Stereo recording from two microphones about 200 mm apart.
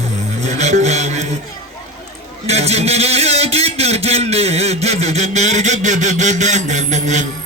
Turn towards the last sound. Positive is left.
turn(degrees=-35)  # may be behind; listen again after turning